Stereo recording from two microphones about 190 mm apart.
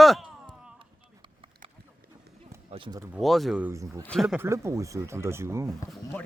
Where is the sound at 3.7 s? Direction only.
15° right (ahead or behind).